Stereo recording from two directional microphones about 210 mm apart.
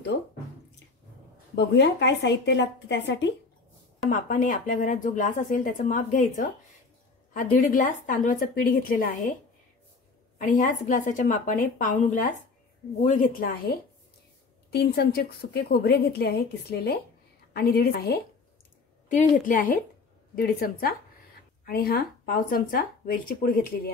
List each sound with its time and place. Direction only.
1.5 s a woman's voice: 55° left (ahead or behind)
4.1 s speech: 40° left (ahead or behind)
10.4 s speech: 35° left (ahead or behind)
19.0 s speech: 40° left (ahead or behind)